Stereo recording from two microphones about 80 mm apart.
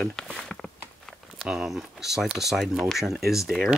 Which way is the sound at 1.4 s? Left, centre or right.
Centre.